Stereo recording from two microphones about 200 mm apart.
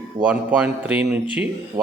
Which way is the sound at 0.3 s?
5° right (ahead or behind).